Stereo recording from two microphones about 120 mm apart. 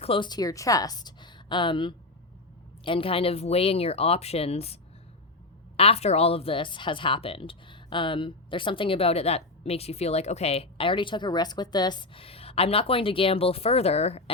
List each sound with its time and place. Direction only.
0.0 s speech: 50° left (ahead or behind)
0.3 s a woman's voice: 30° left (ahead or behind)
12.2 s a woman's voice: 55° left (ahead or behind)